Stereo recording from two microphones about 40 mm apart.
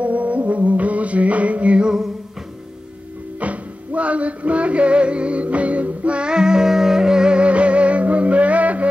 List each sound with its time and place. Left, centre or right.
0.0 s music: right
3.3 s music: right